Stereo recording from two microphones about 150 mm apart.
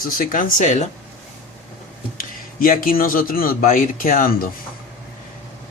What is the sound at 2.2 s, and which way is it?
Speech, 70° left (ahead or behind).